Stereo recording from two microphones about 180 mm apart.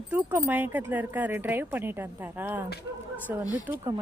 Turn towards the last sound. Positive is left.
turn(degrees=-15)  # may be behind; listen again after turning